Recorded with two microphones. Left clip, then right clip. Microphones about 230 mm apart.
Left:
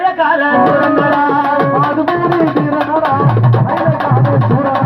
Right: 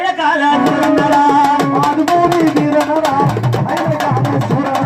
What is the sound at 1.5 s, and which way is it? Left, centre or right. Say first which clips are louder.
Music: left 1 dB; right.